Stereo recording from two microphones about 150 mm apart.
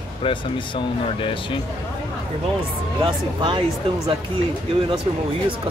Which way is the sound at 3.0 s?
30° right (ahead or behind).